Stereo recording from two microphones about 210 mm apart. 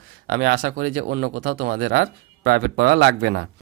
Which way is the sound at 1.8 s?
65° right (ahead or behind).